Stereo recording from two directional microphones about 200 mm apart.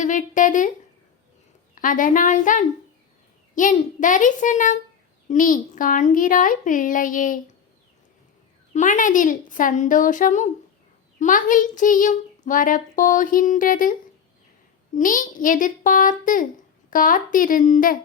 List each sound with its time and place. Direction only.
0.0 s speech: 40° left (ahead or behind)
1.7 s speech: 40° left (ahead or behind)
8.7 s speech: 40° left (ahead or behind)
14.9 s a woman's voice: 40° left (ahead or behind)